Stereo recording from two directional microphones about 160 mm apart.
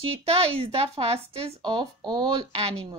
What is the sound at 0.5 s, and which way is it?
Speech, 40° right (ahead or behind).